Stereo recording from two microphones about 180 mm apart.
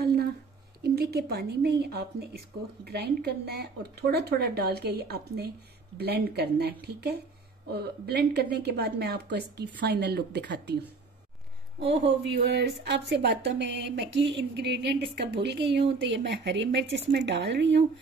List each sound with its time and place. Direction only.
0.0 s a sound: 60° right (ahead or behind)
0.8 s speech: 60° right (ahead or behind)
11.9 s a woman's voice: 70° right (ahead or behind)